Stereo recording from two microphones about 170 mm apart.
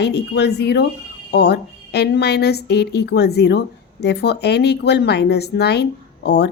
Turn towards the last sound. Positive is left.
turn(degrees=80)